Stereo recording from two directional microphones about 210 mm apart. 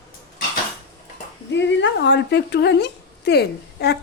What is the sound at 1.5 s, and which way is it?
A woman's voice, 60° left (ahead or behind).